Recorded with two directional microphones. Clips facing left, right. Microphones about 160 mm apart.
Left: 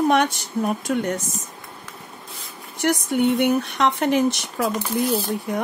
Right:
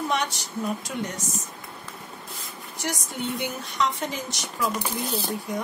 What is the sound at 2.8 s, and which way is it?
Speech, 60° left (ahead or behind).